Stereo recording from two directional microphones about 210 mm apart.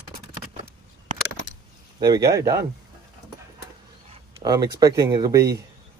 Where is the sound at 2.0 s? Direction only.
15° right (ahead or behind).